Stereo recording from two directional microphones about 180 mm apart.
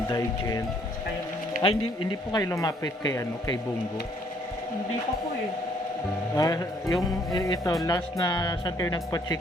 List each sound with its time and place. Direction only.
0.1 s speech: 20° left (ahead or behind)
1.6 s speech: 30° left (ahead or behind)
2.3 s speech: 20° left (ahead or behind)
6.3 s speech: 20° left (ahead or behind)